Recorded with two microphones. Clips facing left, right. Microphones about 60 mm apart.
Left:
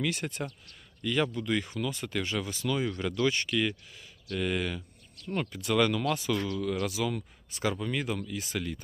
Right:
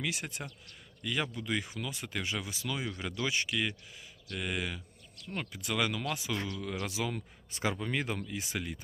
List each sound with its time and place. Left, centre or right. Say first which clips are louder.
0.0 s speech: left 5 dB; centre
6.4 s speech: left 6 dB; right